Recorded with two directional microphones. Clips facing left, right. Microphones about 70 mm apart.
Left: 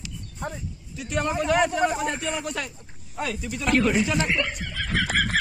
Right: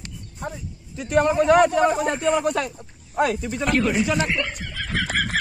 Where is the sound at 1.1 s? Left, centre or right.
Right.